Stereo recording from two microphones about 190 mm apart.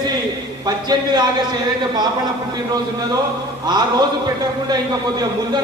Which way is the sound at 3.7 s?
20° right (ahead or behind).